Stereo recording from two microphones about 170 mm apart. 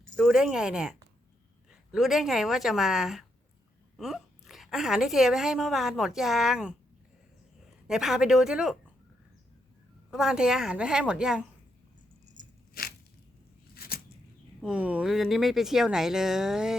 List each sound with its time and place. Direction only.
0.2 s a woman's voice: 5° right (ahead or behind)
7.9 s speech: centre (ahead or behind)
10.1 s speech: 5° right (ahead or behind)
12.8 s a sound: 60° left (ahead or behind)
13.7 s scissors: 65° left (ahead or behind)
14.6 s speech: 5° right (ahead or behind)